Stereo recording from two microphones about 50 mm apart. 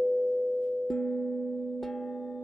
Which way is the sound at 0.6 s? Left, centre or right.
Centre.